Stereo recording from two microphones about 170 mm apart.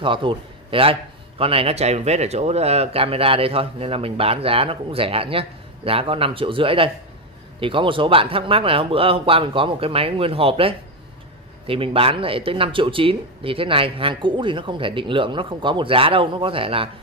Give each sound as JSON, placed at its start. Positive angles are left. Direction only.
{"t": 0.0, "sound": "a man's voice", "side_deg": -30}